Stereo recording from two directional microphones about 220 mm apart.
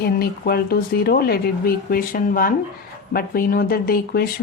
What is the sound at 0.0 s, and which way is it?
Speech, 45° left (ahead or behind).